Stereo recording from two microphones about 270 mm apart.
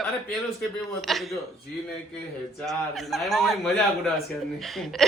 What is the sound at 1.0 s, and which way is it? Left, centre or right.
Speech, centre.